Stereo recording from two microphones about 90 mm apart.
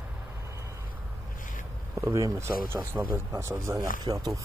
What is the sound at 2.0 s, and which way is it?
Speech, 35° right (ahead or behind).